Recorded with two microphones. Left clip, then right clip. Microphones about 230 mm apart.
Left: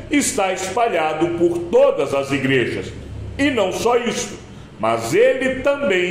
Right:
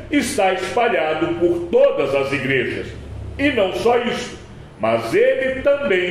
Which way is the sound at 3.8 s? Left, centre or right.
Left.